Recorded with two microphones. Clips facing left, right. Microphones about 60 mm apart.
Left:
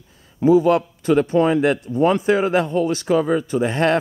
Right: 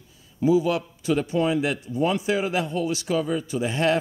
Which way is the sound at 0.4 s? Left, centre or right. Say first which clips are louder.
Left 6 dB; left.